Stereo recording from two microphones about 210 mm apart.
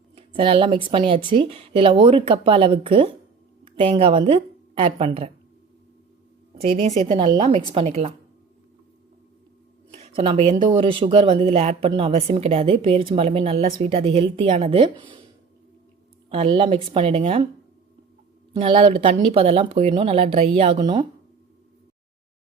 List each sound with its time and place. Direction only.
0.2 s a woman's voice: 25° right (ahead or behind)
6.5 s speech: 30° right (ahead or behind)
9.9 s speech: 30° right (ahead or behind)
16.3 s speech: 25° right (ahead or behind)
18.5 s speech: 25° right (ahead or behind)